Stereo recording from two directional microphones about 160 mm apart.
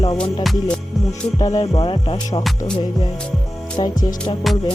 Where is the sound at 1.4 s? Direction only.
25° left (ahead or behind).